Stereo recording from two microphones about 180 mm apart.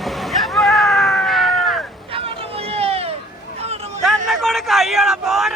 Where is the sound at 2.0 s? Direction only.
30° right (ahead or behind).